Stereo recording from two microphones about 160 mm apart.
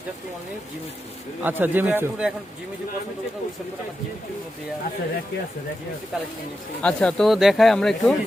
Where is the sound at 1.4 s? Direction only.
10° right (ahead or behind).